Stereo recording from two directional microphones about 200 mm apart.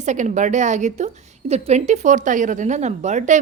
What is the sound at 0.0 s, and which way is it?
A woman's voice, 35° right (ahead or behind).